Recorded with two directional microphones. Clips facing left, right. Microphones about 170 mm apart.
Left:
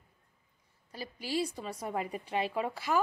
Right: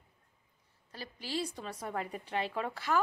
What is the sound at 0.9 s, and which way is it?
A woman's voice, 10° left (ahead or behind).